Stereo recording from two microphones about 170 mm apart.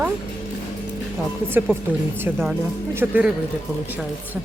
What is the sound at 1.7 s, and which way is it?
Speech, 10° right (ahead or behind).